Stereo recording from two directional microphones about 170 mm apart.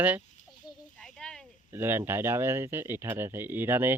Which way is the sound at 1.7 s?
15° right (ahead or behind).